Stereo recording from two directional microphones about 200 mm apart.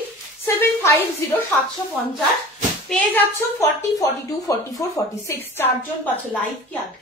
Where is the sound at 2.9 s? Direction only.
10° left (ahead or behind).